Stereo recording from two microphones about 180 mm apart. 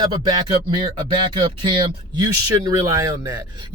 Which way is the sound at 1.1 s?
25° right (ahead or behind).